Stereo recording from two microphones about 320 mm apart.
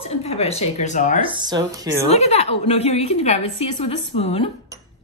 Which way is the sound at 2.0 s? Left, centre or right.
Centre.